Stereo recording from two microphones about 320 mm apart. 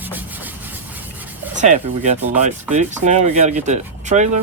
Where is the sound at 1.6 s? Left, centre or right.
Right.